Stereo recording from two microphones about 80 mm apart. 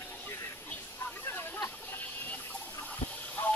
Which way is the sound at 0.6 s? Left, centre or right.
Left.